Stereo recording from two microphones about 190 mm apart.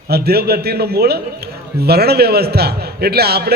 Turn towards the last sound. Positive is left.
turn(degrees=-55)  # may be behind; listen again after turning